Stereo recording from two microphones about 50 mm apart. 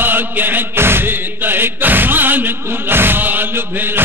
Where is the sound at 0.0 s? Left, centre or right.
Right.